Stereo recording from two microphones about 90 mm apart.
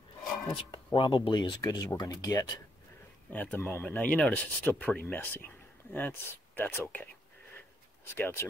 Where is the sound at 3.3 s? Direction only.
15° left (ahead or behind).